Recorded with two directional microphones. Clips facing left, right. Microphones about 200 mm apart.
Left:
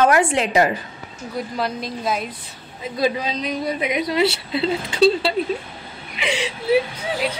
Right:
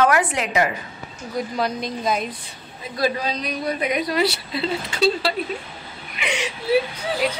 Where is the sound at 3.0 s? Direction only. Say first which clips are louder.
Left 1 dB; 20° left (ahead or behind).